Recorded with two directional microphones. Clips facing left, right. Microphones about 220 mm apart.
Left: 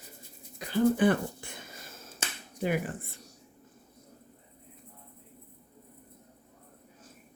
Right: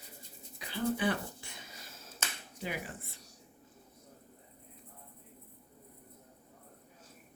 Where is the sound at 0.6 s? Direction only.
45° left (ahead or behind).